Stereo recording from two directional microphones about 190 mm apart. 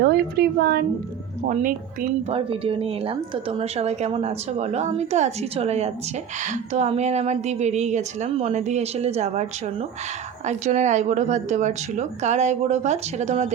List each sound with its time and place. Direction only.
0.0 s a woman's voice: 55° right (ahead or behind)
1.5 s a woman's voice: 45° right (ahead or behind)
2.3 s speech: 30° right (ahead or behind)